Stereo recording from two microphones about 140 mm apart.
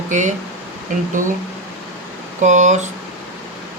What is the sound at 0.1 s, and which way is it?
Speech, 60° right (ahead or behind).